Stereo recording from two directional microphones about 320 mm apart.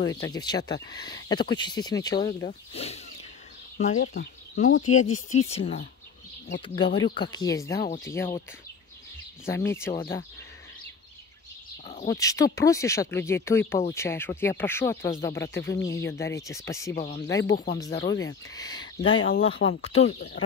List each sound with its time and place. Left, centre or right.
0.0 s speech: centre
9.5 s speech: centre
11.8 s bird: left
12.1 s speech: centre
16.9 s speech: left
17.9 s speech: left
18.5 s speech: centre
20.2 s speech: left